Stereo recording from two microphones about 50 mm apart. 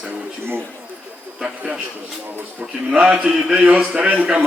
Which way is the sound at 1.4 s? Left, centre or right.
Centre.